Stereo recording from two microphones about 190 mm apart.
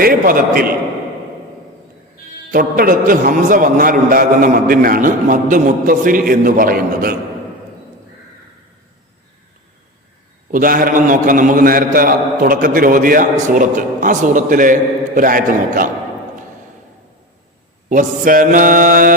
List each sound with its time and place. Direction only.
0.0 s a man's voice: 50° right (ahead or behind)
2.5 s a man's voice: 50° right (ahead or behind)
10.5 s a man's voice: 45° right (ahead or behind)
17.8 s a man's voice: 45° right (ahead or behind)